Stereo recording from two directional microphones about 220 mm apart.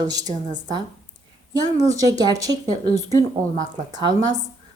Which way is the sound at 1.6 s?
15° right (ahead or behind).